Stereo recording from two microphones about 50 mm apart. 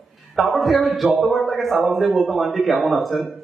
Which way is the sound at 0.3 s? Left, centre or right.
Centre.